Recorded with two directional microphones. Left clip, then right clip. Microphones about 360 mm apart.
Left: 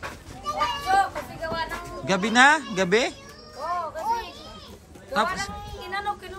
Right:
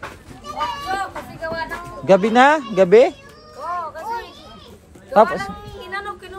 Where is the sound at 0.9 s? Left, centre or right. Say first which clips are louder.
Left 3 dB; centre.